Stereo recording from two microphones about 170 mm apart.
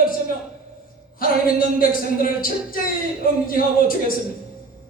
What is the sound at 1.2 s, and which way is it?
Music, 55° left (ahead or behind).